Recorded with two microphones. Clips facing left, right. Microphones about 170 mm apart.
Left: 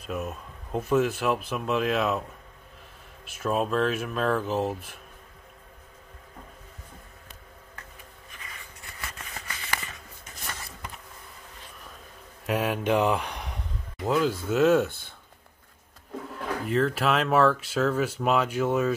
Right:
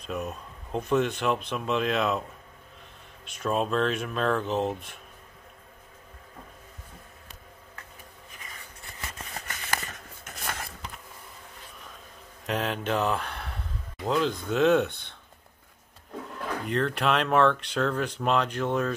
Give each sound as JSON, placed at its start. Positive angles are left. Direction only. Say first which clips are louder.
{"t": 0.0, "sound": "speech", "louder": "even", "side_deg": 5}
{"t": 3.3, "sound": "speech", "louder": "left 1 dB", "side_deg": 5}
{"t": 9.5, "sound": "a sound", "louder": "right 1 dB", "side_deg": -45}
{"t": 12.4, "sound": "speech", "louder": "left 3 dB", "side_deg": 10}
{"t": 14.0, "sound": "speech", "louder": "left 2 dB", "side_deg": 5}
{"t": 16.6, "sound": "speech", "louder": "left 2 dB", "side_deg": 0}